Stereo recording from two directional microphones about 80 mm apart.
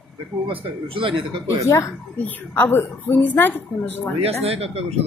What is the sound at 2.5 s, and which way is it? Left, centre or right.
A woman's voice, left.